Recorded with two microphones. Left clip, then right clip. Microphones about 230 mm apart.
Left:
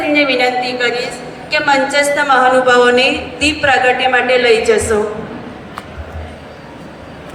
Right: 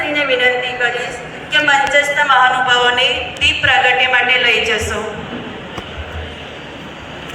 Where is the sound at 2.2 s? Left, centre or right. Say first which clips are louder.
Left 3 dB; left.